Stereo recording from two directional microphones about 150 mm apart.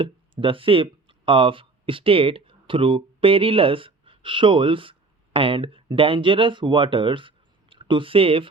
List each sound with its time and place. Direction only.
0.0 s speech: 35° right (ahead or behind)